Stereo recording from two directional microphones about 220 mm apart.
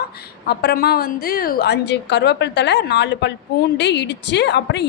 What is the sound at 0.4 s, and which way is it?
A woman's voice, 45° left (ahead or behind).